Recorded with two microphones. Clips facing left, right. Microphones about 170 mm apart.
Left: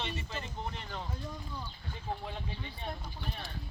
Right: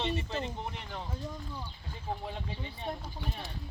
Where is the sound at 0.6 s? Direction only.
15° right (ahead or behind).